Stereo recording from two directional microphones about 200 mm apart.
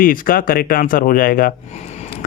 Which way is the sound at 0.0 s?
45° left (ahead or behind).